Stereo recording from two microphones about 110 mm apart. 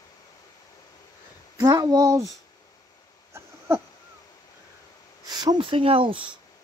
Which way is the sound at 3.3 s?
25° right (ahead or behind).